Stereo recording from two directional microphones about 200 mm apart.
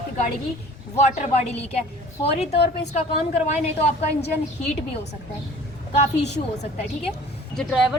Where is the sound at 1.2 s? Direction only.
35° left (ahead or behind).